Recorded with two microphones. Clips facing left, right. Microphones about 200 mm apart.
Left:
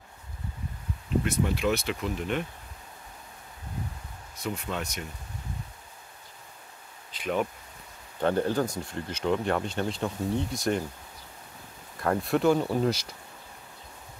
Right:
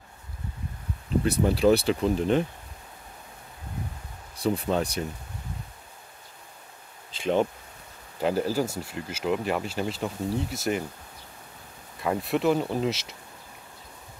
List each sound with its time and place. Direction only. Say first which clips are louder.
1.2 s speech: right 8 dB; 35° right (ahead or behind)
4.4 s speech: right 8 dB; 35° right (ahead or behind)
7.2 s speech: right 4 dB; 30° right (ahead or behind)
8.2 s speech: even; 5° right (ahead or behind)
12.0 s speech: left 1 dB; centre (ahead or behind)